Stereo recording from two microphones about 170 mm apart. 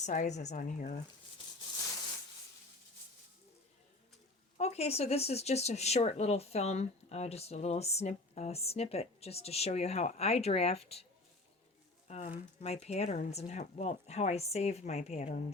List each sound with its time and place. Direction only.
0.0 s a woman's voice: 45° left (ahead or behind)
4.5 s speech: 40° left (ahead or behind)
12.0 s speech: 40° left (ahead or behind)